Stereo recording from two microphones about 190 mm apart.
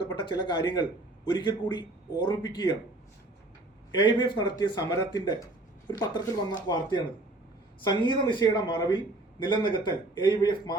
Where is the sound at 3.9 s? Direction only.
25° left (ahead or behind).